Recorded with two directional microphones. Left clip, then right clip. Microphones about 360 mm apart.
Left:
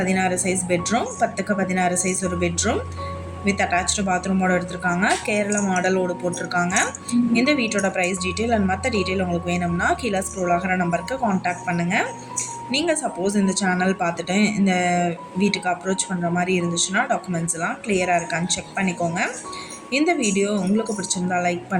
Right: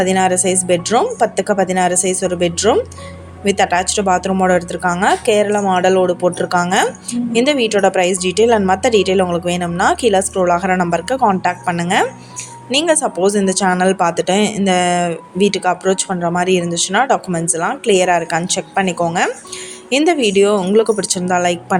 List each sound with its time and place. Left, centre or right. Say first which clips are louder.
0.0 s speech: right 8 dB; right